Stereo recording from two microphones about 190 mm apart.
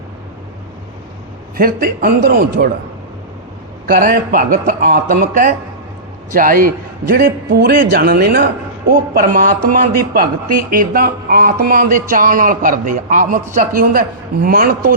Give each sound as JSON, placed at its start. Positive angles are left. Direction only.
{"t": 1.5, "sound": "speech", "side_deg": -50}
{"t": 3.8, "sound": "speech", "side_deg": -50}